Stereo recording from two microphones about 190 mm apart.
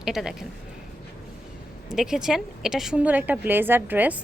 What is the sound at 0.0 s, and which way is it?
Speech, centre (ahead or behind).